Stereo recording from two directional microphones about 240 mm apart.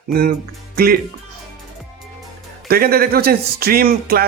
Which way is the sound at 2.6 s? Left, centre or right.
Right.